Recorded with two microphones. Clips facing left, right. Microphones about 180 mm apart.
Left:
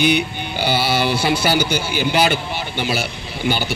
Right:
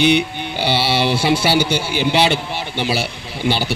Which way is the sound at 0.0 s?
25° right (ahead or behind).